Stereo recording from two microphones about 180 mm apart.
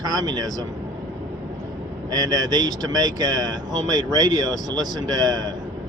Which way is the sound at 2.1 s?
20° right (ahead or behind).